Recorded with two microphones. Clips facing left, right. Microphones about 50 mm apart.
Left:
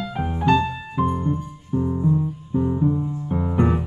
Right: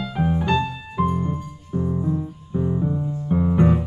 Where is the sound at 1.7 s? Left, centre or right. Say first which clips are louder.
Left 2 dB; centre.